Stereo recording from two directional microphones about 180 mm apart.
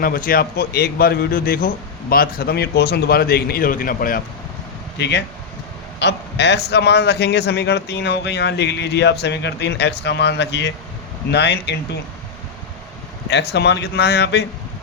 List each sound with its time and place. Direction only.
0.0 s a man's voice: 55° left (ahead or behind)
4.9 s a man's voice: 70° left (ahead or behind)
13.3 s a man's voice: 70° left (ahead or behind)